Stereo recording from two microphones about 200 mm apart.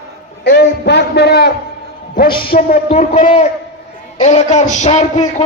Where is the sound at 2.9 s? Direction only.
35° left (ahead or behind).